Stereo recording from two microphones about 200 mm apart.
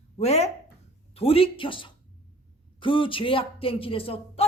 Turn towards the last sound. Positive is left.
turn(degrees=30)  # may be behind; listen again after turning